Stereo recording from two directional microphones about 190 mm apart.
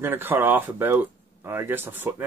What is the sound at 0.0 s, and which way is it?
Speech, 10° right (ahead or behind).